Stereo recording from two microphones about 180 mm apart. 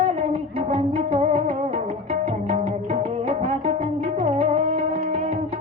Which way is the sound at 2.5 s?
30° right (ahead or behind).